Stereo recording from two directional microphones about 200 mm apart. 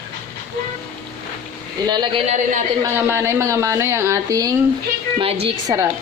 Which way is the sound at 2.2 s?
35° right (ahead or behind).